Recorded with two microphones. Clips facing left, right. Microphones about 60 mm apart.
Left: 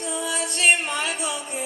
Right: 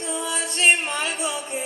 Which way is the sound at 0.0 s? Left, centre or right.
Right.